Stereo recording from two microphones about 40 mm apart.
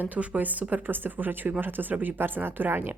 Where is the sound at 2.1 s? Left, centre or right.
Right.